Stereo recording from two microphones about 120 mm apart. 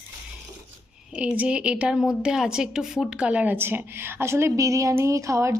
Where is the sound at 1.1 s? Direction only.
10° right (ahead or behind).